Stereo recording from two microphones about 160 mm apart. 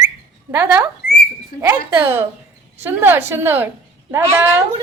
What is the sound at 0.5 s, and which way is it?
A woman's voice, 10° right (ahead or behind).